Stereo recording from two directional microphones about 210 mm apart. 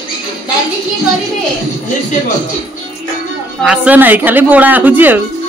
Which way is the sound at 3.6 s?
5° right (ahead or behind).